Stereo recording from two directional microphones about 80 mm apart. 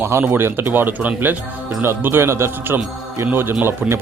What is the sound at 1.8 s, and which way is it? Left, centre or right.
Speech, right.